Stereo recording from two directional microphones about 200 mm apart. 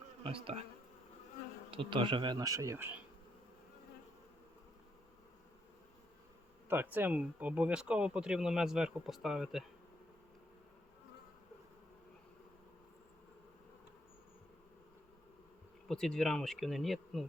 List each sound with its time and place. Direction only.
0.2 s insect: 25° right (ahead or behind)
1.7 s speech: 25° right (ahead or behind)
6.7 s speech: 10° right (ahead or behind)
15.9 s speech: centre (ahead or behind)